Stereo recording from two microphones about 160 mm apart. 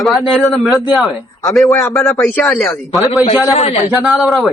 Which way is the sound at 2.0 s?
15° left (ahead or behind).